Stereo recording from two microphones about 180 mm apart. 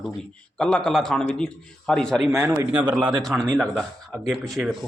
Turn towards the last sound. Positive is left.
turn(degrees=0)  # may be behind; listen again after turning